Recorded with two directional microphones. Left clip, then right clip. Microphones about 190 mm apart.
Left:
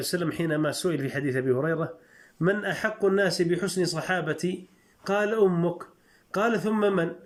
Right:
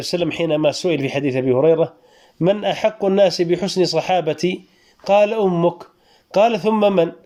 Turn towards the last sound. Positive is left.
turn(degrees=-15)  # may be behind; listen again after turning